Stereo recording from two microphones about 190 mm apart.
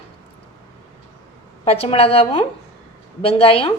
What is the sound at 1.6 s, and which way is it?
A woman's voice, 30° left (ahead or behind).